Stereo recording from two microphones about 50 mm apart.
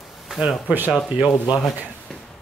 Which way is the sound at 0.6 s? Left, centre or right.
Right.